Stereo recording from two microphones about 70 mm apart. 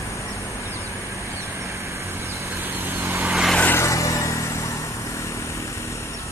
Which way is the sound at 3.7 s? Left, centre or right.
Left.